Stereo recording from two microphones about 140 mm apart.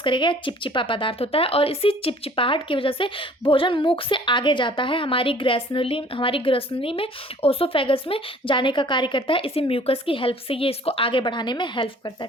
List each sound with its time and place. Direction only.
0.0 s speech: 35° left (ahead or behind)